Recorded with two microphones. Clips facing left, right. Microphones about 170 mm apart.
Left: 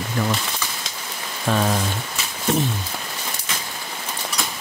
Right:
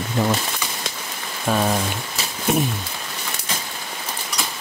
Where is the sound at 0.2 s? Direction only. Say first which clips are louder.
Right 3 dB; 25° right (ahead or behind).